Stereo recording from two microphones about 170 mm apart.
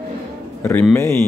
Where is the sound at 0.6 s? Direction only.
15° left (ahead or behind).